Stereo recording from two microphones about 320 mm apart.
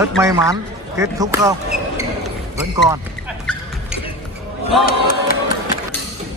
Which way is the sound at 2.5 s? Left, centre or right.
Centre.